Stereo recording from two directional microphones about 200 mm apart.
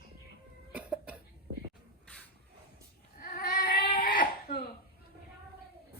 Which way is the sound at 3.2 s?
45° left (ahead or behind).